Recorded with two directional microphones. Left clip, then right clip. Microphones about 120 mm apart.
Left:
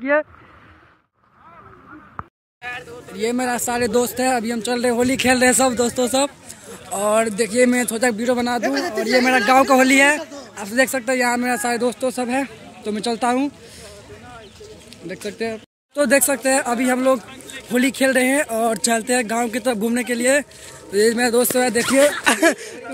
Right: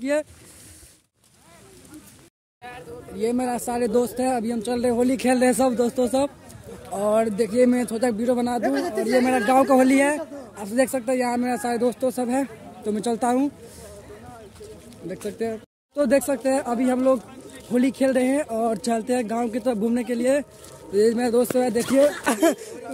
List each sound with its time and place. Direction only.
0.0 s speech: 25° right (ahead or behind)
2.6 s speech: 30° right (ahead or behind)
3.1 s speech: centre (ahead or behind)
5.1 s a man's voice: 10° right (ahead or behind)
8.6 s speech: 35° right (ahead or behind)
9.4 s a man's voice: 10° right (ahead or behind)
15.0 s a man's voice: centre (ahead or behind)